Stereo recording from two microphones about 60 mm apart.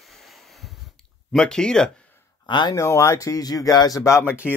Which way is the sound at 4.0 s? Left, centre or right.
Left.